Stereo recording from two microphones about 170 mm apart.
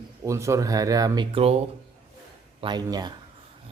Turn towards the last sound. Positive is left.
turn(degrees=-25)  # may be behind; listen again after turning